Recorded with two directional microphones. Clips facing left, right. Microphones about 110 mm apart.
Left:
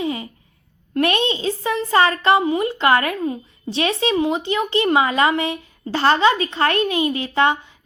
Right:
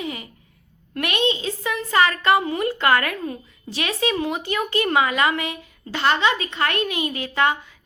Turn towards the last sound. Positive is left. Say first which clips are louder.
# left 3 dB
turn(degrees=25)  # may be behind; listen again after turning